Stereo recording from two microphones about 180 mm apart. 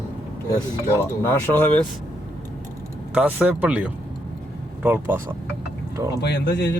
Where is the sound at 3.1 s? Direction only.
5° right (ahead or behind).